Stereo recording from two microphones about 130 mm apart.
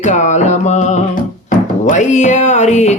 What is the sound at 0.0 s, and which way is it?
Music, 65° left (ahead or behind).